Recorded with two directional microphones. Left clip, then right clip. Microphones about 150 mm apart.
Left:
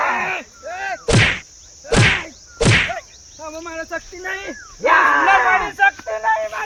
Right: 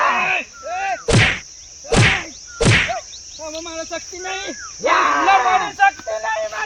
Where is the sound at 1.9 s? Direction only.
Centre (ahead or behind).